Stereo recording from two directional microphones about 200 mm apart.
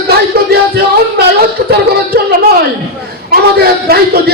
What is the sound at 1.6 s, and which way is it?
Music, 50° right (ahead or behind).